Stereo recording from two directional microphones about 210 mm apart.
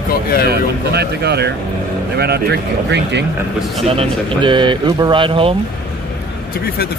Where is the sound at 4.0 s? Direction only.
20° right (ahead or behind).